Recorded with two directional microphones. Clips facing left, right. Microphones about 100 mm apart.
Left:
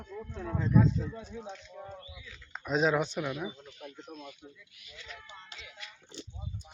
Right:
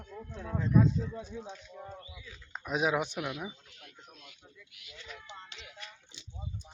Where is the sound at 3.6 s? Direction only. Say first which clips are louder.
Left 10 dB; 90° left.